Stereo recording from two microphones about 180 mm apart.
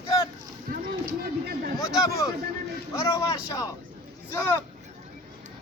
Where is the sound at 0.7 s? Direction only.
55° right (ahead or behind).